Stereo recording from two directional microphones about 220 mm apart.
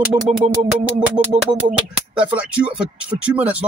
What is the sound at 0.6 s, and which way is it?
Speech, 5° right (ahead or behind).